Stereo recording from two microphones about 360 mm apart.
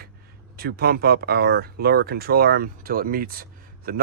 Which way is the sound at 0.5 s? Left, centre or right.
Right.